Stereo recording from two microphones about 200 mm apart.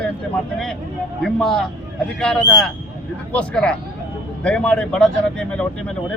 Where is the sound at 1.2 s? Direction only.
Centre (ahead or behind).